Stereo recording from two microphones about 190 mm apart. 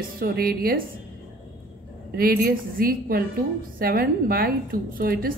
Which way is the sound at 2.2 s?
50° right (ahead or behind).